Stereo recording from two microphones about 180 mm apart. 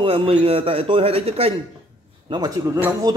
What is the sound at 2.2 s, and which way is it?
Speech, 20° right (ahead or behind).